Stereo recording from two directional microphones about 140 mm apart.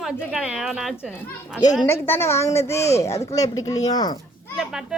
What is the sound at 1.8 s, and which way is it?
A woman's voice, 15° left (ahead or behind).